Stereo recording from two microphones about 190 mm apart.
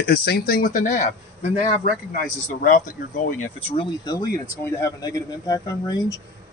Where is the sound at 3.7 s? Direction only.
25° left (ahead or behind).